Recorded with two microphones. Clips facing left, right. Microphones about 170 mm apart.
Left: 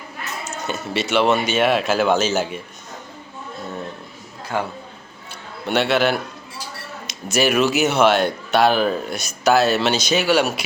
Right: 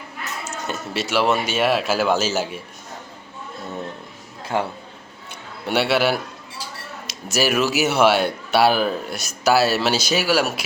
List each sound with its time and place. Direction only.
0.7 s speech: centre (ahead or behind)
4.5 s a man's voice: 20° right (ahead or behind)
5.6 s a man's voice: 10° right (ahead or behind)